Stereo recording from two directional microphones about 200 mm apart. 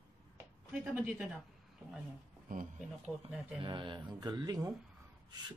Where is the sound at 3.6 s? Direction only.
25° right (ahead or behind).